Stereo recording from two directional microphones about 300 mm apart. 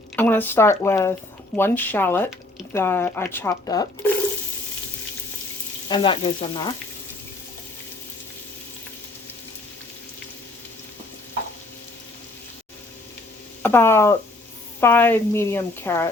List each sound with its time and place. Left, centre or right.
0.2 s speech: centre
5.9 s speech: centre
13.6 s speech: centre